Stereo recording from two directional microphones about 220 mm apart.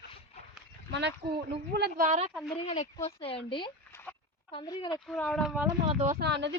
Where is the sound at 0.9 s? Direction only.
50° right (ahead or behind); by 2.3 s 35° right (ahead or behind).